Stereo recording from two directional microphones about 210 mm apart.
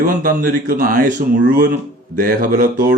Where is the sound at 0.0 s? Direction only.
40° right (ahead or behind).